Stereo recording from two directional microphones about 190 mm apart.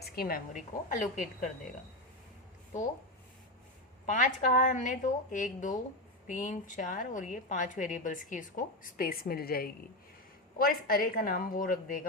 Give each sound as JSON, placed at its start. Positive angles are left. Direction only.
{"t": 0.0, "sound": "a woman's voice", "side_deg": 50}
{"t": 4.0, "sound": "a woman's voice", "side_deg": 40}